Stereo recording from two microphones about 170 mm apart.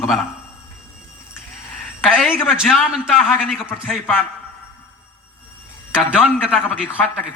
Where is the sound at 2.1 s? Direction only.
5° right (ahead or behind).